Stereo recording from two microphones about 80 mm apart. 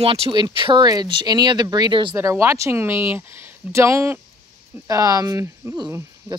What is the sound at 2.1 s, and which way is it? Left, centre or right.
Speech, right.